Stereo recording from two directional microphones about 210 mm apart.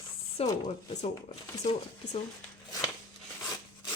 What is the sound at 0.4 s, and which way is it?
Speech, 20° left (ahead or behind).